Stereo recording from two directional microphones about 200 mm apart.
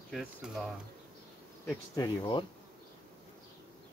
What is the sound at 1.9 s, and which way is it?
Speech, 20° left (ahead or behind).